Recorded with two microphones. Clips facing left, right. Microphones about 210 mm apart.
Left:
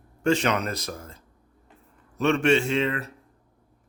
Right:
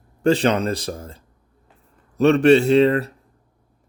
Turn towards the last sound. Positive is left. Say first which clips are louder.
# right 10 dB
turn(degrees=-35)  # may be behind; listen again after turning